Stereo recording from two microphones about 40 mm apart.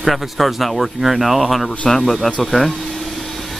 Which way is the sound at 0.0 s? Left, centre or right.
Centre.